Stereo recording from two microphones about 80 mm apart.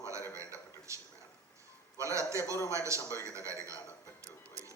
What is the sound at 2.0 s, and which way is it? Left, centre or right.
A man's voice, right.